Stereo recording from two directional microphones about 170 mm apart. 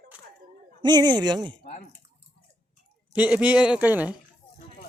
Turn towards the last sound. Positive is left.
turn(degrees=-10)  # may be behind; listen again after turning